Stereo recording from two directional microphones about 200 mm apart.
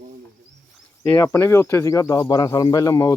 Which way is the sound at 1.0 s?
15° left (ahead or behind).